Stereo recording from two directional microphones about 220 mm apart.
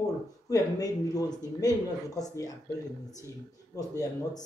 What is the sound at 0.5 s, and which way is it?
Speech, 15° left (ahead or behind).